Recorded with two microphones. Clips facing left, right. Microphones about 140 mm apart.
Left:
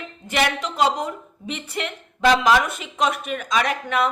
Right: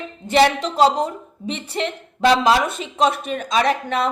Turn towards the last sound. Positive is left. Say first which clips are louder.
# right 3 dB
turn(degrees=-30)  # may be behind; listen again after turning